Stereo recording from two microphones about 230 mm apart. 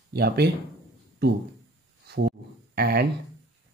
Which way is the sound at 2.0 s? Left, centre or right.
Right.